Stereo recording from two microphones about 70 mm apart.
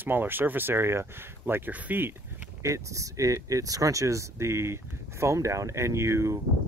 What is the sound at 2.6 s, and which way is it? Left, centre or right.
Speech, right.